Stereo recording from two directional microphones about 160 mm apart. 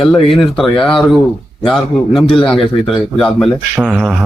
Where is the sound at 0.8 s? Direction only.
Centre (ahead or behind).